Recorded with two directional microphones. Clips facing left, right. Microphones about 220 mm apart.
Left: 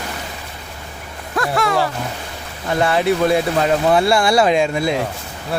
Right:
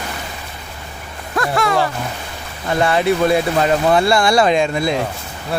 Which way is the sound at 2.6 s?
Centre (ahead or behind).